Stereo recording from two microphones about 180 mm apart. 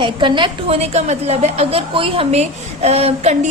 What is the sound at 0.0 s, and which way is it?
A woman's voice, 25° right (ahead or behind).